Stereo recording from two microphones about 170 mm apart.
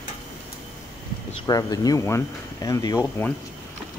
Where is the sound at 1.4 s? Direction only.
20° left (ahead or behind).